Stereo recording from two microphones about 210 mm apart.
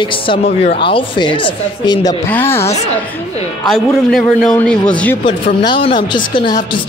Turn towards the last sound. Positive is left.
turn(degrees=25)  # may be behind; listen again after turning